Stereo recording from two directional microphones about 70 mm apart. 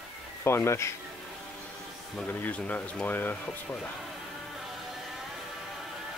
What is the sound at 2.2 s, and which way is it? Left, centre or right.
Speech, left.